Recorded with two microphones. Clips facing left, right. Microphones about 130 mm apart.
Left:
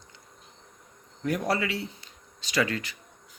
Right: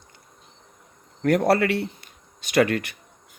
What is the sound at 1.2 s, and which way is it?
Speech, 70° right (ahead or behind).